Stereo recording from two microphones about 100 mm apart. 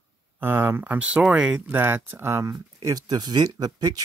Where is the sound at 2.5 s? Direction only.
35° right (ahead or behind).